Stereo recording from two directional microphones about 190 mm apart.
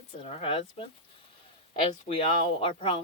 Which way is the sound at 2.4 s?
30° left (ahead or behind).